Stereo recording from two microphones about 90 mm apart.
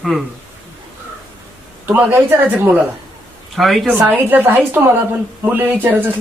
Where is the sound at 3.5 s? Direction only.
Centre (ahead or behind).